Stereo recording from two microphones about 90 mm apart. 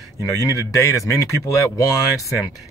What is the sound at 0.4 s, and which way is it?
Speech, 40° left (ahead or behind).